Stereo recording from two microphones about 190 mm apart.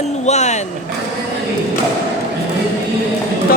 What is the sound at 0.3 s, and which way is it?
Speech, 35° left (ahead or behind).